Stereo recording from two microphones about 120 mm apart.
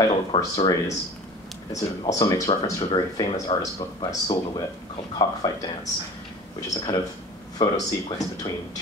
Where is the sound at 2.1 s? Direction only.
30° left (ahead or behind).